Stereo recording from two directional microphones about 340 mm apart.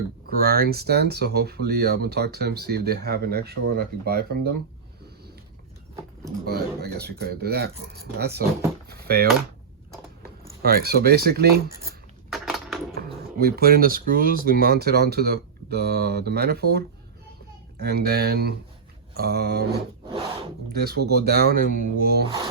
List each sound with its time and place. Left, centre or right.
0.3 s speech: right
6.4 s speech: right
8.9 s a sound: right
10.6 s speech: right
12.3 s crushing: centre
13.4 s speech: right